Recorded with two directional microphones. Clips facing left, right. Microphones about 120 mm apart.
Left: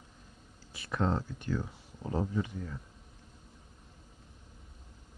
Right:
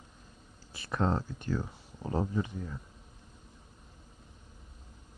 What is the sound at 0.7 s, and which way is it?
Speech, 35° right (ahead or behind).